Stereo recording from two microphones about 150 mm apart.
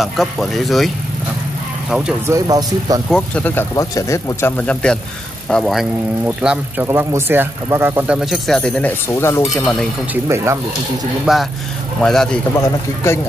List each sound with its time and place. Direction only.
0.0 s speech: centre (ahead or behind)
2.2 s speech: 20° right (ahead or behind)
3.1 s speech: 5° left (ahead or behind)
3.7 s speech: 20° left (ahead or behind); by 8.2 s 15° right (ahead or behind)
8.2 s speech: centre (ahead or behind)
9.1 s speech: 15° left (ahead or behind)
10.2 s speech: 20° right (ahead or behind)
11.3 s speech: 5° right (ahead or behind)
12.5 s speech: 20° left (ahead or behind)